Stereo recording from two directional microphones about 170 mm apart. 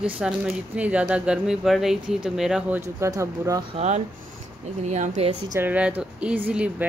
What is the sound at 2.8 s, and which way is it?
Speech, 15° right (ahead or behind).